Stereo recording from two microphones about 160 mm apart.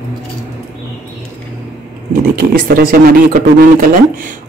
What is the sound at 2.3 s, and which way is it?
Speech, 60° right (ahead or behind).